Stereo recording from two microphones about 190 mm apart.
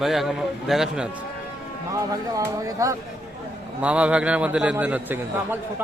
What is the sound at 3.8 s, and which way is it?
A man's voice, 5° right (ahead or behind).